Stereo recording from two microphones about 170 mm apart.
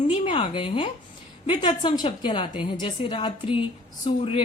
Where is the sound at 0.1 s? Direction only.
30° left (ahead or behind).